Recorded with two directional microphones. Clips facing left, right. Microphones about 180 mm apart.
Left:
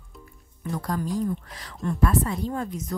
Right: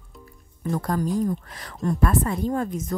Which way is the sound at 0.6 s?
50° right (ahead or behind).